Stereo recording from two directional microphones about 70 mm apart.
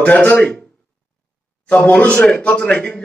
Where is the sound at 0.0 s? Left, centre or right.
Centre.